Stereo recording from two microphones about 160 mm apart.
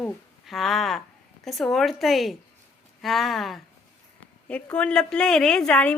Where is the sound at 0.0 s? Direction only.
Centre (ahead or behind).